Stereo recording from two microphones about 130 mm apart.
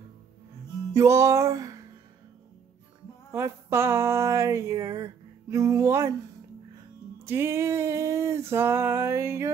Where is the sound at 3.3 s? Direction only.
20° right (ahead or behind).